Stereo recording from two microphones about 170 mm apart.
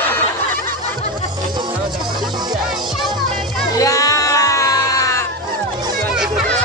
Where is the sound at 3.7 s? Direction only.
20° left (ahead or behind).